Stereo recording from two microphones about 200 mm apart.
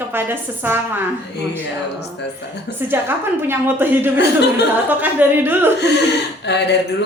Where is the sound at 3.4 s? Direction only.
10° right (ahead or behind).